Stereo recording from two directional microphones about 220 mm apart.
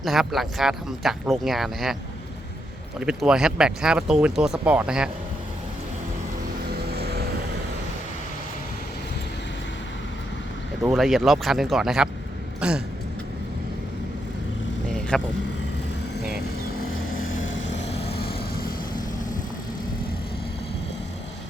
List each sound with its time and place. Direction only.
0.0 s speech: centre (ahead or behind)
3.0 s speech: 5° right (ahead or behind)
6.9 s vehicle: 45° right (ahead or behind)
10.8 s speech: centre (ahead or behind)
12.5 s a sound: 5° right (ahead or behind)
15.1 s speech: centre (ahead or behind)
17.1 s vehicle: 65° left (ahead or behind); by 19.0 s 45° left (ahead or behind)